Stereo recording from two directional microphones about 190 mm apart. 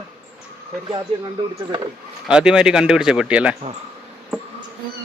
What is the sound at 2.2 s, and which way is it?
Speech, 5° right (ahead or behind).